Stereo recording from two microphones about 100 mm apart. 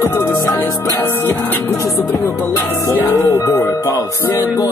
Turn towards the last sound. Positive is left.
turn(degrees=35)  # may be behind; listen again after turning